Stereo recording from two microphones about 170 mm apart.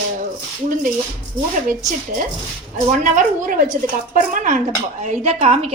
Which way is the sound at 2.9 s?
50° right (ahead or behind).